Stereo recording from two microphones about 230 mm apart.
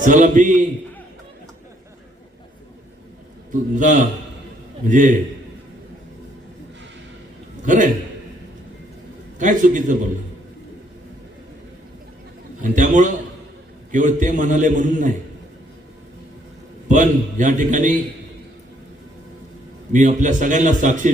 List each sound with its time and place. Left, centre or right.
0.0 s a man's voice: right
3.5 s a man's voice: right
7.6 s a man's voice: right
9.4 s a man's voice: right
12.6 s a man's voice: right
16.9 s a man's voice: right
19.9 s a man's voice: right